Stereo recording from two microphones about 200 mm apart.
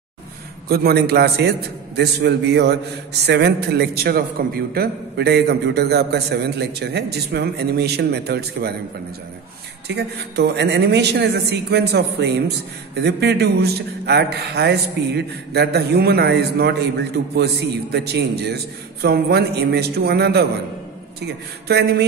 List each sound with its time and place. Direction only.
0.7 s a man's voice: 50° right (ahead or behind)
9.8 s a man's voice: 55° right (ahead or behind)
21.6 s a man's voice: 55° right (ahead or behind)